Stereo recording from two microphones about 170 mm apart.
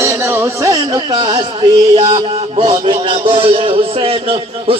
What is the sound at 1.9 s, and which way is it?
A man's voice, 35° right (ahead or behind).